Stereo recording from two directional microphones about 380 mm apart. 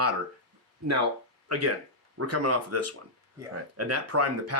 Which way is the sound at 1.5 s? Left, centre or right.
Right.